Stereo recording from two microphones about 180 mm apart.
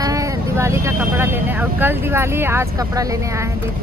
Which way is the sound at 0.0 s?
20° right (ahead or behind).